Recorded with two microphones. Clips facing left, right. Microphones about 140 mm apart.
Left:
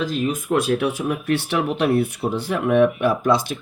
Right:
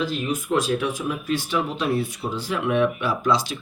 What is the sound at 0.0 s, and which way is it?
Speech, 45° left (ahead or behind).